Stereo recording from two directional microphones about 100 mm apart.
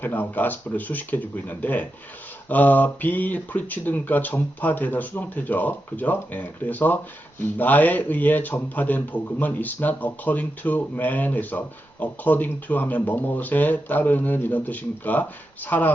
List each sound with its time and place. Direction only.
0.0 s speech: 15° left (ahead or behind)